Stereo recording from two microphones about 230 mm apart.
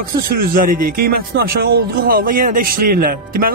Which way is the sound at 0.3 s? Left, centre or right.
Right.